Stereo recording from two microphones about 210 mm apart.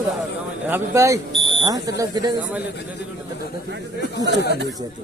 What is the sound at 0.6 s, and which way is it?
Speech, 10° right (ahead or behind).